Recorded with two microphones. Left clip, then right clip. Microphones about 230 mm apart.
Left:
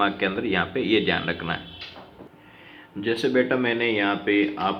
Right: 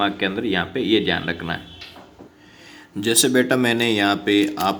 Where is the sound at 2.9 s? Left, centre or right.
Right.